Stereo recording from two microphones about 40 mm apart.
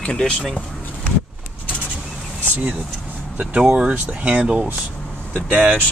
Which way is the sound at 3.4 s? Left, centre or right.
Right.